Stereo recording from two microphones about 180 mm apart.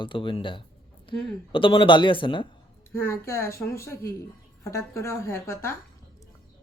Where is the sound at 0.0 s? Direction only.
30° left (ahead or behind).